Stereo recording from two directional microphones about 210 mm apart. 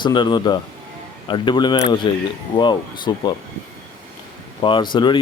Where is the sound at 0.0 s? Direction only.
20° left (ahead or behind).